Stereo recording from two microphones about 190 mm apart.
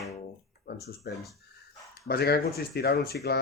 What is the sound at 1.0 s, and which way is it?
Speech, 55° left (ahead or behind).